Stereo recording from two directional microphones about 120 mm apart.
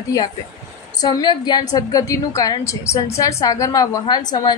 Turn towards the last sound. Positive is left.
turn(degrees=35)  # may be behind; listen again after turning